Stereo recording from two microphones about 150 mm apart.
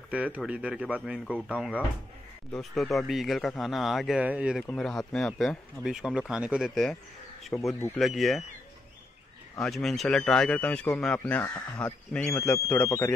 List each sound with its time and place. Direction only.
0.1 s a man's voice: 10° right (ahead or behind)
4.6 s speech: 5° left (ahead or behind)
5.9 s speech: 5° right (ahead or behind)
7.5 s speech: 10° left (ahead or behind)
8.0 s speech: centre (ahead or behind)
9.6 s speech: centre (ahead or behind); by 13.1 s 20° left (ahead or behind)